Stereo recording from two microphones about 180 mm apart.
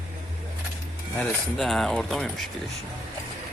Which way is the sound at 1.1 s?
Centre (ahead or behind).